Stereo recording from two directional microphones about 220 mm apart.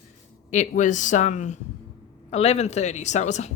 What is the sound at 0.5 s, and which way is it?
A woman's voice, 35° left (ahead or behind).